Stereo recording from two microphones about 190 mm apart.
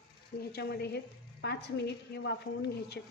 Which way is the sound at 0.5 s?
60° left (ahead or behind).